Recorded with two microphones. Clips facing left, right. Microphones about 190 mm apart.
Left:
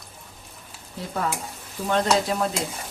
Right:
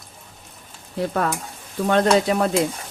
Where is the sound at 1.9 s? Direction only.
65° right (ahead or behind).